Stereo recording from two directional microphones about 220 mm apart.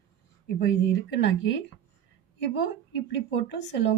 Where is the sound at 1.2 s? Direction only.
55° left (ahead or behind).